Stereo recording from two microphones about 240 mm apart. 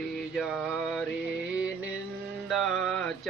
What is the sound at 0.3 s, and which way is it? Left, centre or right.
Mantra, centre.